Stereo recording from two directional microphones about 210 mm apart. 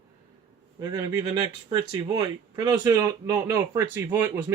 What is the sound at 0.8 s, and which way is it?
Speech, 15° right (ahead or behind).